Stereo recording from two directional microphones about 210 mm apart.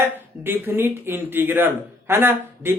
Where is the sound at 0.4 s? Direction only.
10° right (ahead or behind).